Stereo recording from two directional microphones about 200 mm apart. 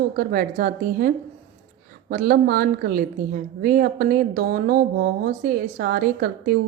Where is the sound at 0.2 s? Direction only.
50° right (ahead or behind).